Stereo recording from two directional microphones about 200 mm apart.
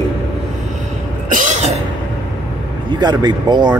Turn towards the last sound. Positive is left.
turn(degrees=-20)  # may be behind; listen again after turning